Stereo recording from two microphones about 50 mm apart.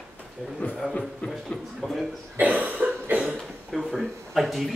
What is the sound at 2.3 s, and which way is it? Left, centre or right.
Cough, right.